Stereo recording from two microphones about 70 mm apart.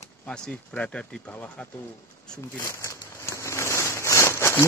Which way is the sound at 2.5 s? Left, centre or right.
Left.